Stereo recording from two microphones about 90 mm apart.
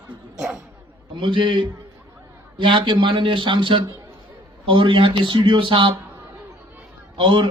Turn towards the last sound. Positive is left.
turn(degrees=-65)  # may be behind; listen again after turning